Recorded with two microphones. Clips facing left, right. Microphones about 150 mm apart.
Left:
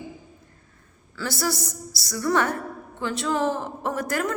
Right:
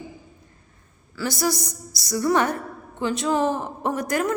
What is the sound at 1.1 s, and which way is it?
A woman's voice, 15° right (ahead or behind).